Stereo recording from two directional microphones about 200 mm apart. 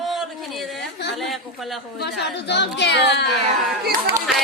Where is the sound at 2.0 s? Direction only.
60° left (ahead or behind).